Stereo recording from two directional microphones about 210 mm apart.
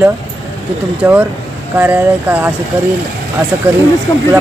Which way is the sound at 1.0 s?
10° right (ahead or behind).